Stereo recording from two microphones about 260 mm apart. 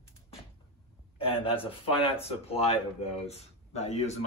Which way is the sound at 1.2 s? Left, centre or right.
Left.